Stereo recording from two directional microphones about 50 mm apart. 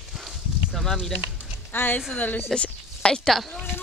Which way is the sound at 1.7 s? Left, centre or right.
Left.